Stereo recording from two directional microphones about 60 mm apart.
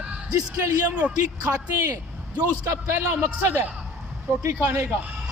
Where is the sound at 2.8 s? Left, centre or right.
Right.